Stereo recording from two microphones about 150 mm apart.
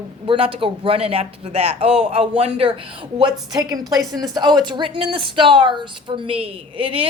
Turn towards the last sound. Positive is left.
turn(degrees=-35)  # may be behind; listen again after turning